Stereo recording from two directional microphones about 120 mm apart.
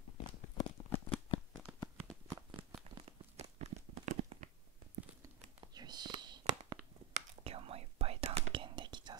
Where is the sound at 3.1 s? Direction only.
65° right (ahead or behind).